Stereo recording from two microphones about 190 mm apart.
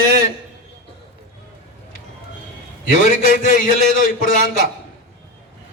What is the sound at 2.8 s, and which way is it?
A man's voice, 45° left (ahead or behind).